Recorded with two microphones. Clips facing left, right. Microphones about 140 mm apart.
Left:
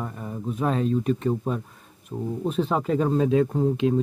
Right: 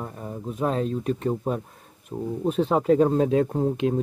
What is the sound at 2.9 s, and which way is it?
Speech, 35° right (ahead or behind).